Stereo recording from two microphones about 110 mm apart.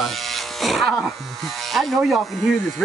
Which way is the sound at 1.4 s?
Centre (ahead or behind).